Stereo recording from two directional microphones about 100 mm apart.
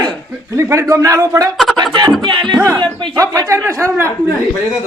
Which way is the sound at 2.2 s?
50° right (ahead or behind).